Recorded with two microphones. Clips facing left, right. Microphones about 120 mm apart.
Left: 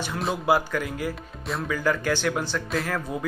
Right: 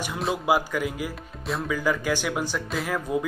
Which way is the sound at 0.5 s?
10° right (ahead or behind).